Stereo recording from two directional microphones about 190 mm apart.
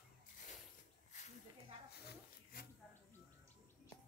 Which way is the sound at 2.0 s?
50° left (ahead or behind).